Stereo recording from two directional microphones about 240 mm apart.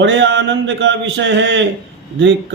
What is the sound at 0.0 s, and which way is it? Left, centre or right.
Mantra, right.